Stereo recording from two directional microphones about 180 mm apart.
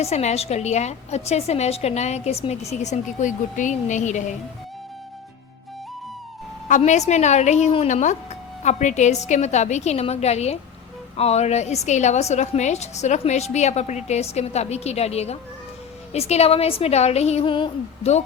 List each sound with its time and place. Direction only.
0.0 s a woman's voice: 40° left (ahead or behind)
6.7 s a woman's voice: 45° left (ahead or behind)